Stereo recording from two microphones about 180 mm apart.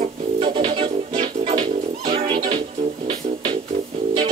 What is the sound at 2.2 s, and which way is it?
Music, 30° right (ahead or behind).